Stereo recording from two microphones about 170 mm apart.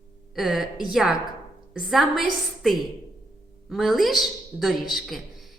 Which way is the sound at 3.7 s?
Centre (ahead or behind).